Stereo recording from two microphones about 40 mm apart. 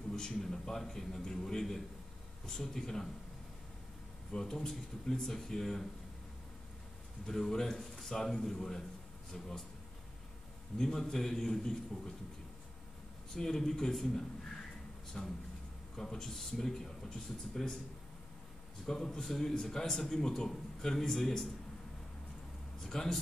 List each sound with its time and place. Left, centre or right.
0.3 s a man's voice: centre
4.3 s a man's voice: centre
7.2 s a man's voice: centre
10.8 s a man's voice: centre
13.3 s a man's voice: centre
18.9 s a man's voice: centre
22.8 s speech: centre